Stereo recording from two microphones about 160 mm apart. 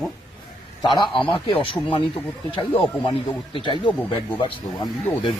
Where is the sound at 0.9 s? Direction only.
30° left (ahead or behind).